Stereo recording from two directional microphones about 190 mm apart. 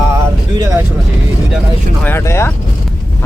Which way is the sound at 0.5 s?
20° right (ahead or behind).